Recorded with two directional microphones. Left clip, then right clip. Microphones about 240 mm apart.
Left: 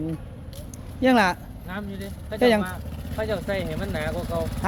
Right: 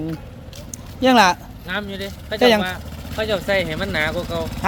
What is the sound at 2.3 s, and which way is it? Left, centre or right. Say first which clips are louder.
Speech: right 5 dB; centre.